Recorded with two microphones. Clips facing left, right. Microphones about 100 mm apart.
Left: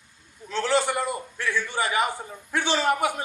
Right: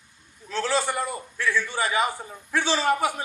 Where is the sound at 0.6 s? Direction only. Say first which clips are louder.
Left 2 dB; 20° left (ahead or behind).